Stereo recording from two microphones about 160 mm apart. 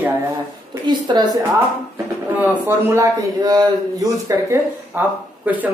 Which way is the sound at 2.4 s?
15° right (ahead or behind).